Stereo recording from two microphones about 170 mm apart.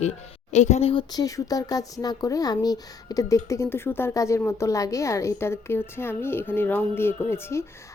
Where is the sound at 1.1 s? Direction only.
20° left (ahead or behind).